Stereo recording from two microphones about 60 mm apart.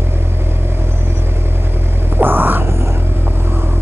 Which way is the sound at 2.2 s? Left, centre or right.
Right.